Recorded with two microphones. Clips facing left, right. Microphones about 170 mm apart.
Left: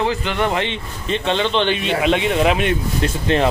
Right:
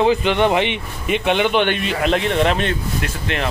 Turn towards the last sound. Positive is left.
turn(degrees=30)  # may be behind; listen again after turning